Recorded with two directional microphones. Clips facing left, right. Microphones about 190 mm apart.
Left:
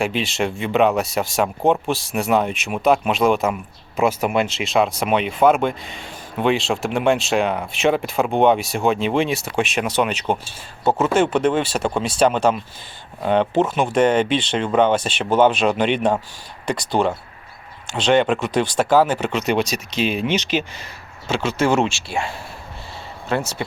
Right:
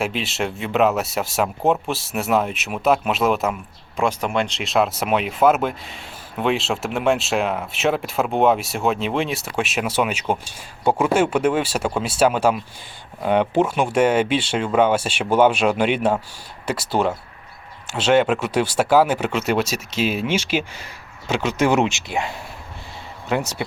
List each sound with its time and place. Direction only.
0.0 s speech: centre (ahead or behind)